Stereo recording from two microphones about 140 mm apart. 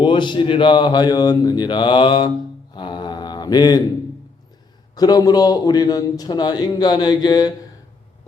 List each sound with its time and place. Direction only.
0.0 s speech: 35° left (ahead or behind)
2.7 s mantra: 35° left (ahead or behind)
4.9 s a man's voice: 30° left (ahead or behind)